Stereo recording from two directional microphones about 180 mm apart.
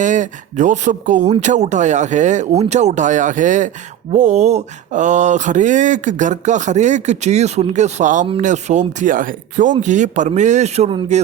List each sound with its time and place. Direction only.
0.0 s mantra: 45° right (ahead or behind)
8.4 s speech: 40° right (ahead or behind)
9.8 s mantra: 40° right (ahead or behind)